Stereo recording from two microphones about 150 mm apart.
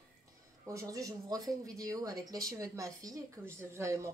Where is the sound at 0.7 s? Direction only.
20° right (ahead or behind).